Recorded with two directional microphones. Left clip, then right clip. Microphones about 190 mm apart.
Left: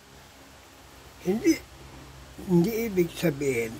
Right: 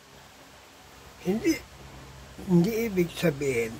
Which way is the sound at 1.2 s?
5° left (ahead or behind).